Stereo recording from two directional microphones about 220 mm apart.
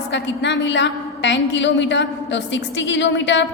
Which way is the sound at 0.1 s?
55° left (ahead or behind).